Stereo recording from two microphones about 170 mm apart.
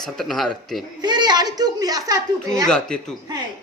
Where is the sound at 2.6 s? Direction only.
5° left (ahead or behind).